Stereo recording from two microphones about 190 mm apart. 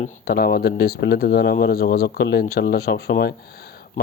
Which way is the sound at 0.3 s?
55° left (ahead or behind).